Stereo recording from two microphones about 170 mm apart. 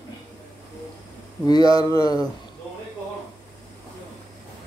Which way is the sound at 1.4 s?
25° left (ahead or behind).